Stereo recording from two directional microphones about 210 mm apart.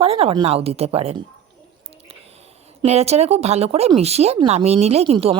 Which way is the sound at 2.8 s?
30° right (ahead or behind).